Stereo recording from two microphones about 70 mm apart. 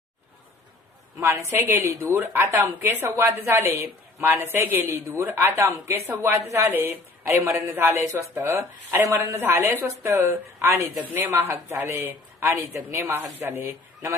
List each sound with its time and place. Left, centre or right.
1.2 s a woman's voice: right
1.5 s speech: right
9.0 s a woman's voice: right
9.4 s speech: right
11.4 s speech: right